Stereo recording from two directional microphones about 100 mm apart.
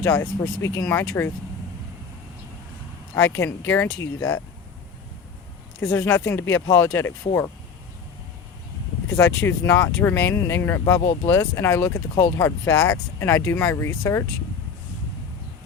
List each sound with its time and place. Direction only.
0.0 s speech: 25° left (ahead or behind)
3.2 s speech: 25° left (ahead or behind)
5.9 s speech: 25° left (ahead or behind)
9.1 s speech: 25° left (ahead or behind)